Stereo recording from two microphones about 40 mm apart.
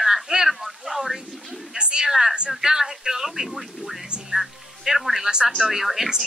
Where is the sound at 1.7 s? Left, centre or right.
Right.